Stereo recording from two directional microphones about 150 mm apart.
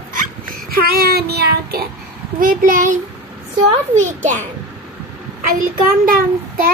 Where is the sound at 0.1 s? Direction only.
75° right (ahead or behind).